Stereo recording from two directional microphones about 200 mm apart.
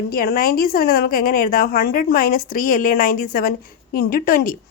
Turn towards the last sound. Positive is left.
turn(degrees=45)  # may be behind; listen again after turning